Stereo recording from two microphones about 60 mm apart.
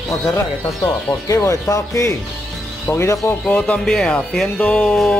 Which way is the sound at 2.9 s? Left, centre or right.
Left.